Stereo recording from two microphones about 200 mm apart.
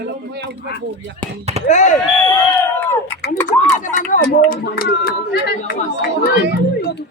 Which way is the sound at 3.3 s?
40° left (ahead or behind).